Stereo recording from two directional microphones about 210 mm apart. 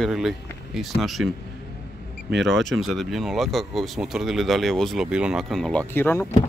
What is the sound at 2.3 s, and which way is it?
Speech, 55° right (ahead or behind).